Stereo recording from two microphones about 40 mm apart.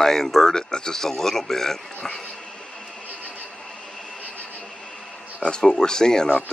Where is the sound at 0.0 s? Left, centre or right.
Centre.